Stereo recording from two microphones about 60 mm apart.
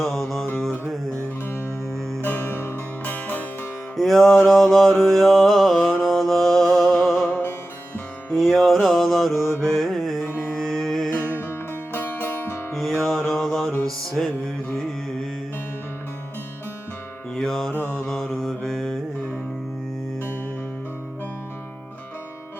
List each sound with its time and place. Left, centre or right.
0.0 s music: centre
1.5 s music: left
3.9 s music: centre
7.3 s music: left
8.3 s music: centre
9.4 s mantra: left
9.6 s music: centre
11.1 s music: left
12.7 s music: centre
13.2 s mantra: centre
14.2 s music: centre
17.3 s music: centre
17.7 s mantra: left
18.1 s mantra: centre